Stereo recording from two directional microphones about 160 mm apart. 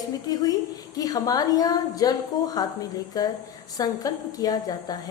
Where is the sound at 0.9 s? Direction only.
20° left (ahead or behind).